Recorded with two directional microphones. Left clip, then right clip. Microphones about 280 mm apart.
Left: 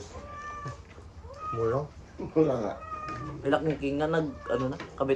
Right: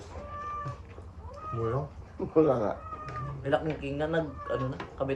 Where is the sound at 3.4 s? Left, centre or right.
Centre.